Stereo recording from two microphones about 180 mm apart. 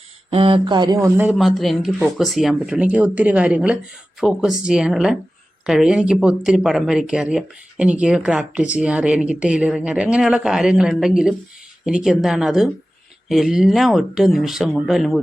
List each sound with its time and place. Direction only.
0.3 s speech: 30° right (ahead or behind); by 1.4 s 10° right (ahead or behind)
1.4 s speech: centre (ahead or behind)